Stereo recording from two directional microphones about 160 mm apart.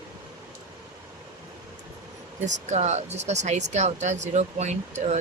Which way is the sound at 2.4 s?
45° right (ahead or behind).